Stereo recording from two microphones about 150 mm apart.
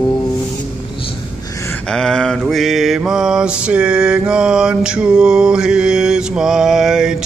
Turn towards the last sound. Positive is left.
turn(degrees=-5)  # may be behind; listen again after turning